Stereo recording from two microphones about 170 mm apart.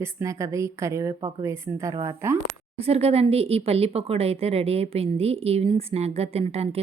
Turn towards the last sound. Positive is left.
turn(degrees=-35)  # may be behind; listen again after turning